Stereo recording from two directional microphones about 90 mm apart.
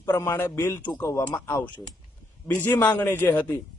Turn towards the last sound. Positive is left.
turn(degrees=20)  # may be behind; listen again after turning